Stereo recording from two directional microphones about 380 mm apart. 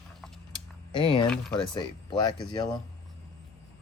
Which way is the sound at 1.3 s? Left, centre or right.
Centre.